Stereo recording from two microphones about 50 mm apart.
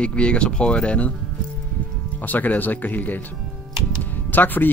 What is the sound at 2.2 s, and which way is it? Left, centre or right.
Speech, left.